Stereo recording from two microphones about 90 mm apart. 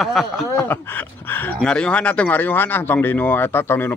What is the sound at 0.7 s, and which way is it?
Speech, 20° left (ahead or behind).